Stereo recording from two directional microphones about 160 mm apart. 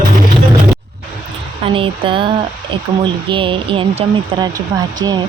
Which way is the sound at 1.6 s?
35° right (ahead or behind).